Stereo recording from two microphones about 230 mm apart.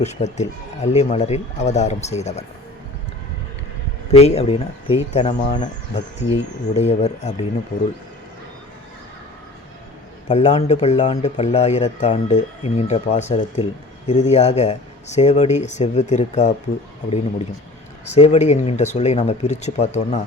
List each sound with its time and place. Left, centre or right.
0.0 s speech: left
4.1 s speech: left
10.2 s speech: left
18.0 s speech: left